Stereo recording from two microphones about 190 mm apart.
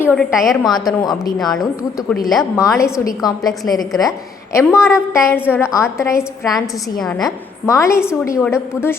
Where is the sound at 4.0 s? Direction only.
15° left (ahead or behind).